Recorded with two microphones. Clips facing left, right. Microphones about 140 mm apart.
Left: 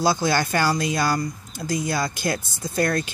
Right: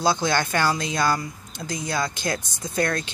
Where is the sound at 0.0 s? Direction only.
5° left (ahead or behind).